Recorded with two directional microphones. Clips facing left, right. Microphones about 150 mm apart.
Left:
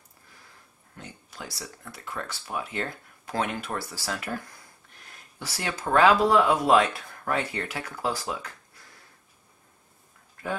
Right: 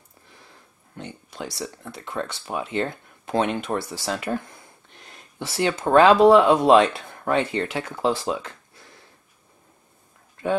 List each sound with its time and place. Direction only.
0.9 s speech: 25° right (ahead or behind)